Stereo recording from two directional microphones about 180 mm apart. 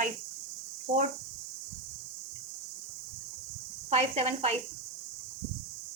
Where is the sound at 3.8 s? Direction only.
35° right (ahead or behind).